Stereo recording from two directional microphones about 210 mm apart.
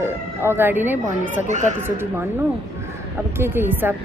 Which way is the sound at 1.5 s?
35° right (ahead or behind).